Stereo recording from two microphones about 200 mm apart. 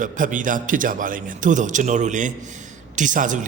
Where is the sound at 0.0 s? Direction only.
40° right (ahead or behind).